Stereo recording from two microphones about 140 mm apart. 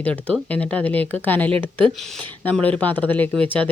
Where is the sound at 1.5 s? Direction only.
40° right (ahead or behind).